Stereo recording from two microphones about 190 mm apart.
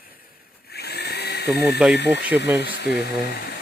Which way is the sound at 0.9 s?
60° left (ahead or behind).